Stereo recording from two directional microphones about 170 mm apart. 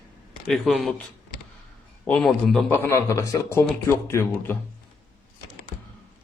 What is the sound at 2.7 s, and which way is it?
A man's voice, 15° left (ahead or behind).